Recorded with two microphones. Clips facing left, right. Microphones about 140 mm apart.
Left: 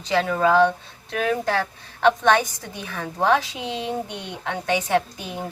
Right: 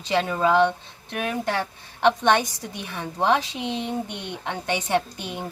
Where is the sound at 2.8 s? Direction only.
20° right (ahead or behind).